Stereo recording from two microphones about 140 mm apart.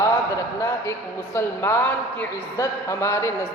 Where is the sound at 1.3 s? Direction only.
20° left (ahead or behind).